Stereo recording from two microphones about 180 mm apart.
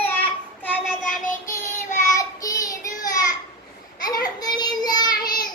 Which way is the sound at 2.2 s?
20° left (ahead or behind).